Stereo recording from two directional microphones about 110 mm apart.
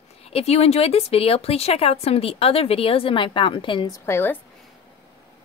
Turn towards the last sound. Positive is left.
turn(degrees=20)  # may be behind; listen again after turning